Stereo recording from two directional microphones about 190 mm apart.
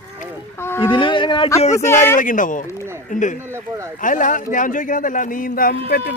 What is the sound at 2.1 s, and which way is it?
Speech, 45° left (ahead or behind).